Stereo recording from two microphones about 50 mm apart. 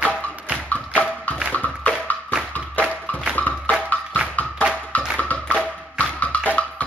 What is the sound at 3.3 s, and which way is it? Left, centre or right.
Music, left.